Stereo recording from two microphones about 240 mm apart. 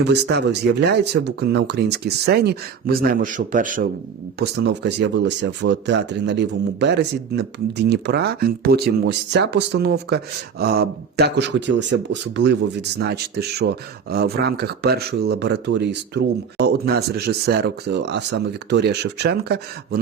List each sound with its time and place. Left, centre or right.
0.0 s speech: right